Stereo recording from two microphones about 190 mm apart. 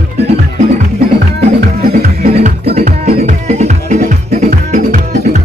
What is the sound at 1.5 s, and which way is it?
Music, 50° right (ahead or behind).